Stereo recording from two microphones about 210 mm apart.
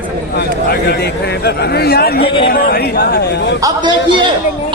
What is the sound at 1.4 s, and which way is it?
Speech, 50° left (ahead or behind).